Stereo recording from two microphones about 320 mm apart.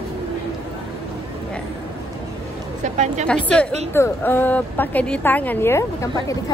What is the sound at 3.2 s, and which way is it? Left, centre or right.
A woman's voice, centre.